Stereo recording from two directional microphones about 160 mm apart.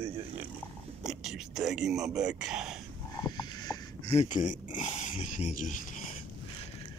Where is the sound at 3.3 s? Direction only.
25° left (ahead or behind).